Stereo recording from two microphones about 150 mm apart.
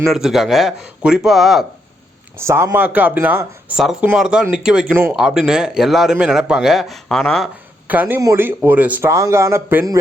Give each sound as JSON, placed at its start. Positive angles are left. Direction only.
{"t": 0.1, "sound": "speech", "side_deg": 0}
{"t": 2.4, "sound": "a man's voice", "side_deg": -20}
{"t": 7.9, "sound": "a man's voice", "side_deg": -10}